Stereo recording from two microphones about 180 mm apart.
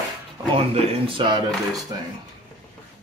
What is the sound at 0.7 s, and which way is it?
Speech, 35° right (ahead or behind).